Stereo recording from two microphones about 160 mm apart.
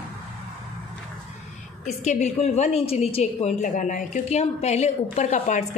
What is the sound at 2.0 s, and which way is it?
A woman's voice, 45° left (ahead or behind).